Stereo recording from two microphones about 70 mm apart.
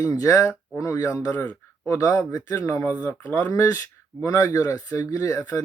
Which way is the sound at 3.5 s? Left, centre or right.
Left.